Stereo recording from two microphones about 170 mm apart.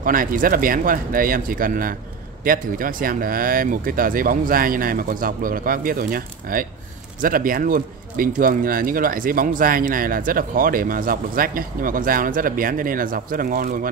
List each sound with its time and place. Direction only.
0.0 s speech: 55° right (ahead or behind)